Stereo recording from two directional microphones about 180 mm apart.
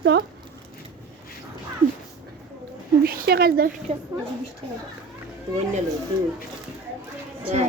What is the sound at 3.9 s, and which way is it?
Speech, 35° right (ahead or behind).